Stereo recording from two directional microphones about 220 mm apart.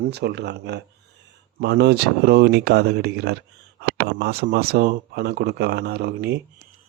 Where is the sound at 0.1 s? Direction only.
50° right (ahead or behind).